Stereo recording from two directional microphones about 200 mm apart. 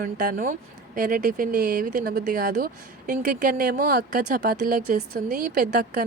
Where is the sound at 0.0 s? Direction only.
45° right (ahead or behind).